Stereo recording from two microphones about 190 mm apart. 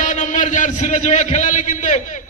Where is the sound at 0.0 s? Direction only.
40° left (ahead or behind).